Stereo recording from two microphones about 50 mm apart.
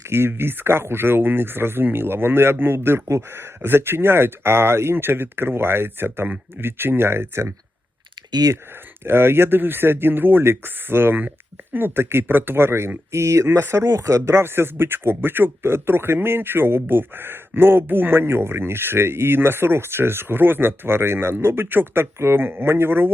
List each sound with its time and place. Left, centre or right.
0.0 s speech: right
9.0 s speech: right
13.1 s speech: right
13.8 s speech: right
22.2 s speech: right